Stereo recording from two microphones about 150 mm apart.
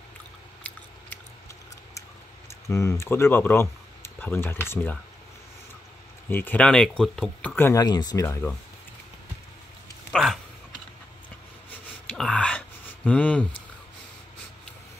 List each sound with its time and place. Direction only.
0.7 s scissors: 10° left (ahead or behind)
2.7 s speech: 20° left (ahead or behind)
6.2 s speech: 10° left (ahead or behind)
7.8 s speech: 25° left (ahead or behind)
8.3 s speech: 15° left (ahead or behind)
10.1 s a sound: 5° left (ahead or behind)
12.1 s a sound: 5° left (ahead or behind)